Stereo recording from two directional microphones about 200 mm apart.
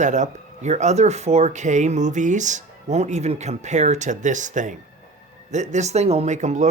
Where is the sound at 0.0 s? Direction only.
35° right (ahead or behind).